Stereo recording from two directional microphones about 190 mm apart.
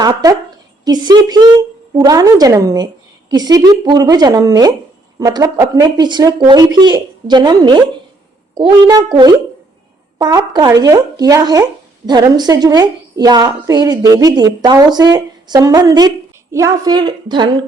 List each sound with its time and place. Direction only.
0.0 s a woman's voice: 20° right (ahead or behind)